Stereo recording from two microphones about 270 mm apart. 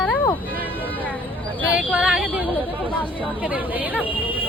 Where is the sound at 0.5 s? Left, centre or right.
Centre.